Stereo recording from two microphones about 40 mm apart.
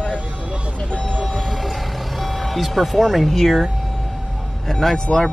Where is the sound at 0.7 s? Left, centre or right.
Left.